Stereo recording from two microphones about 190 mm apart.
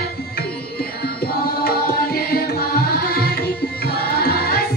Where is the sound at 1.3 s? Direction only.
50° left (ahead or behind).